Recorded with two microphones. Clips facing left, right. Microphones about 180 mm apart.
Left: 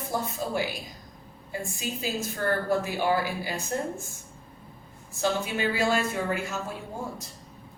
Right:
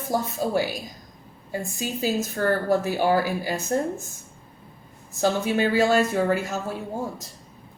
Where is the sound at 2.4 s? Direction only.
40° right (ahead or behind).